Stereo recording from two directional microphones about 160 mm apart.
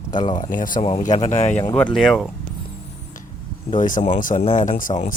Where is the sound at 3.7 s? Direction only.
55° left (ahead or behind).